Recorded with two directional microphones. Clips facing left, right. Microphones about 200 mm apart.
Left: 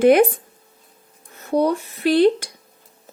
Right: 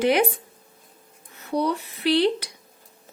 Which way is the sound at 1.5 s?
45° left (ahead or behind).